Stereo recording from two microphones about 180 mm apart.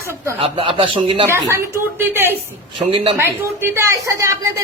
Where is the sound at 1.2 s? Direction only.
15° right (ahead or behind).